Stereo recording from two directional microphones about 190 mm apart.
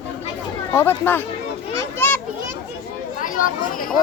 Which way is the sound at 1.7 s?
15° left (ahead or behind).